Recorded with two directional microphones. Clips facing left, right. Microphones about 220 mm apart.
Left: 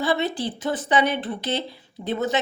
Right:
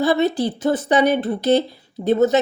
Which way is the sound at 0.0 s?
40° right (ahead or behind).